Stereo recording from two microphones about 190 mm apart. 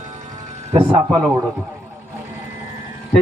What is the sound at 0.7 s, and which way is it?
Speech, 30° right (ahead or behind).